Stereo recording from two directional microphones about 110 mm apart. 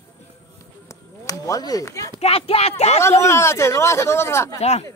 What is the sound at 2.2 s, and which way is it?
Speech, 60° left (ahead or behind).